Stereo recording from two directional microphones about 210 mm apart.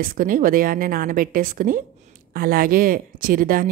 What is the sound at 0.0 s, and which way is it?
A woman's voice, 40° right (ahead or behind).